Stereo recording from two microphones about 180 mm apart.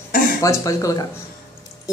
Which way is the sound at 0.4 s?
15° left (ahead or behind).